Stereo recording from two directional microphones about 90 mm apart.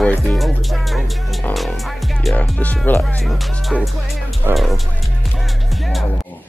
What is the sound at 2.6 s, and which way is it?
Speech, 15° left (ahead or behind).